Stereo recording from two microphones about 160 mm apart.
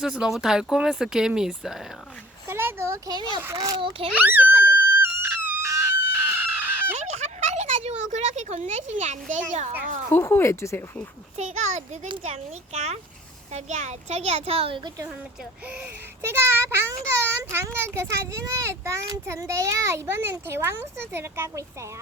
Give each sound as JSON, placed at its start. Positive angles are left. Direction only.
{"t": 0.0, "sound": "speech", "side_deg": -5}
{"t": 2.5, "sound": "a child's voice", "side_deg": -15}
{"t": 3.8, "sound": "a child's voice", "side_deg": -35}
{"t": 4.1, "sound": "screaming", "side_deg": -10}
{"t": 6.9, "sound": "a sound", "side_deg": -45}
{"t": 9.5, "sound": "a child's voice", "side_deg": -50}
{"t": 10.1, "sound": "speech", "side_deg": 15}
{"t": 11.3, "sound": "a child's voice", "side_deg": -45}
{"t": 16.2, "sound": "a child's voice", "side_deg": -15}